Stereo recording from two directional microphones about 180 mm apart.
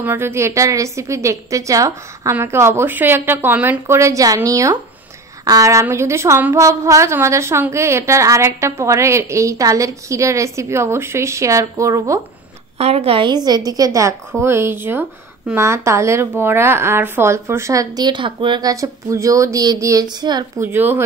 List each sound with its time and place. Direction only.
0.0 s a woman's voice: 15° right (ahead or behind)
12.7 s a woman's voice: 35° right (ahead or behind)
20.6 s a woman's voice: 10° right (ahead or behind)